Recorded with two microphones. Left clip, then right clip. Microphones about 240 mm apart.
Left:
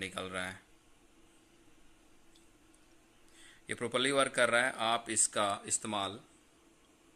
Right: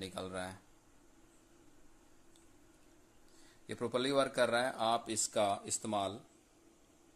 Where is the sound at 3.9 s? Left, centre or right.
Centre.